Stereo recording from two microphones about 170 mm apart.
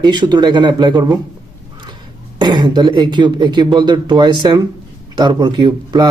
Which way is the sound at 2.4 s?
25° right (ahead or behind).